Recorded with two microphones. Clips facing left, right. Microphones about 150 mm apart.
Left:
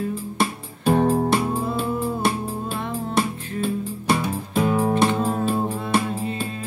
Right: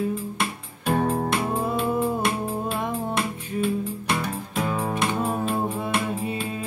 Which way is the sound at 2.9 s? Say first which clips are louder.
Left 3 dB; 35° left (ahead or behind).